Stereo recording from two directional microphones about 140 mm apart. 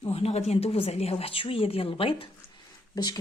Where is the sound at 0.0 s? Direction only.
45° left (ahead or behind).